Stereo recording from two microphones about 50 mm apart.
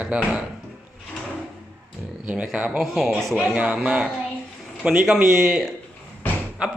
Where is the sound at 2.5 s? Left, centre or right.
Right.